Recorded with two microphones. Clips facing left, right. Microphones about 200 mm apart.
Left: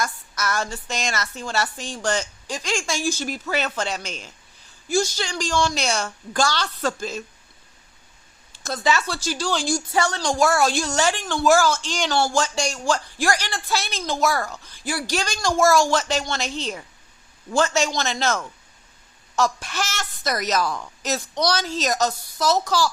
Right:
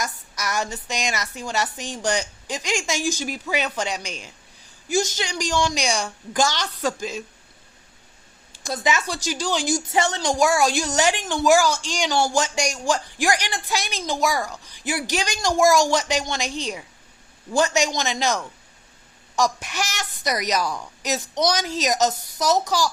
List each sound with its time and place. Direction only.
0.0 s a man's voice: 15° right (ahead or behind)
8.6 s a man's voice: 15° right (ahead or behind)